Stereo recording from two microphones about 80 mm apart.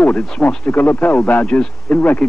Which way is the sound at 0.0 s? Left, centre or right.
Centre.